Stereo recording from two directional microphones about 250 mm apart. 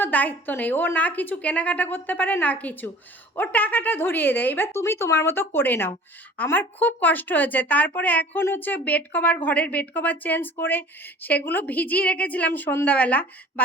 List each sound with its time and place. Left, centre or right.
0.0 s a woman's voice: centre